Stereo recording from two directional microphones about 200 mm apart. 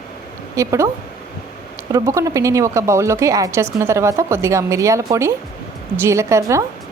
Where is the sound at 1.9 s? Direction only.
15° right (ahead or behind).